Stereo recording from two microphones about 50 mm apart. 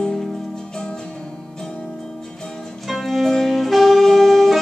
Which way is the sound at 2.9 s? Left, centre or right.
Centre.